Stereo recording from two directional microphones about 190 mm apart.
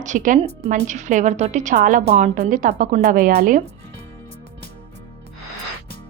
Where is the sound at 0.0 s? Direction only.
40° right (ahead or behind).